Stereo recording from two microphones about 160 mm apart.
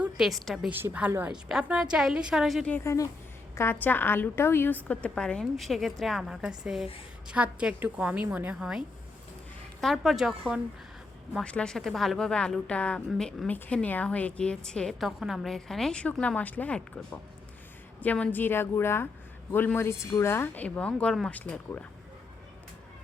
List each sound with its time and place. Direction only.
0.0 s a woman's voice: centre (ahead or behind)
2.6 s a woman's voice: 15° left (ahead or behind); by 8.8 s 5° right (ahead or behind)
9.8 s speech: centre (ahead or behind)
18.0 s a woman's voice: 10° left (ahead or behind)